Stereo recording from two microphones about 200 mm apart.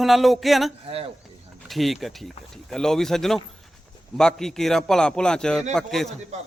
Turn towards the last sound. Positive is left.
turn(degrees=0)  # may be behind; listen again after turning